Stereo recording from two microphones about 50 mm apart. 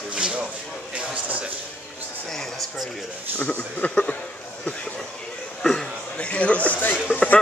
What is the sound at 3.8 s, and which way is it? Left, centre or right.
Speech, left.